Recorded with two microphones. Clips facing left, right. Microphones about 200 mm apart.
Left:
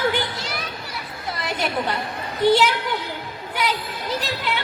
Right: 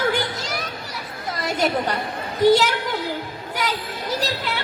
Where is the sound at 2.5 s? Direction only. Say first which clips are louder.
Right 1 dB; 45° right (ahead or behind).